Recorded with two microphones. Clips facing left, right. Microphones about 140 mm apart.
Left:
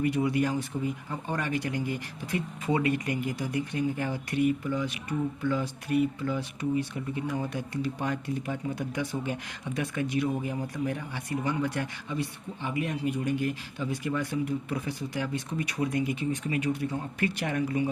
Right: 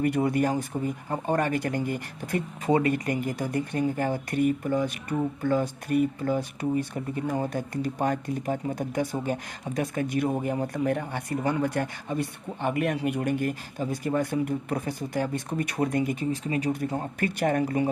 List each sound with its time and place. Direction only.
0.0 s speech: 50° right (ahead or behind)
16.3 s speech: 35° right (ahead or behind)